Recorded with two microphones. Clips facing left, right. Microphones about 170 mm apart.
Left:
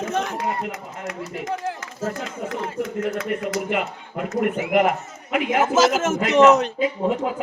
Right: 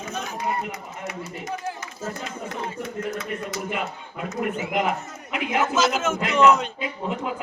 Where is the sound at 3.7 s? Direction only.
65° left (ahead or behind).